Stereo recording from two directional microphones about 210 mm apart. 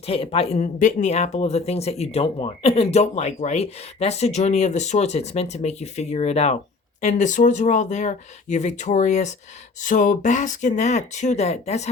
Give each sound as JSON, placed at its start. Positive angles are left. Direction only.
{"t": 0.1, "sound": "speech", "side_deg": 25}